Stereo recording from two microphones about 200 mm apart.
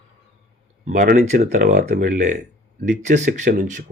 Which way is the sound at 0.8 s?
40° right (ahead or behind).